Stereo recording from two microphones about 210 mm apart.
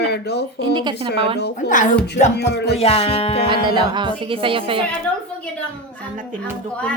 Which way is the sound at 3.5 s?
20° right (ahead or behind).